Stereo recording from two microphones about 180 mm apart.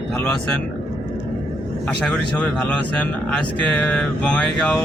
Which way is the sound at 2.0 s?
5° left (ahead or behind).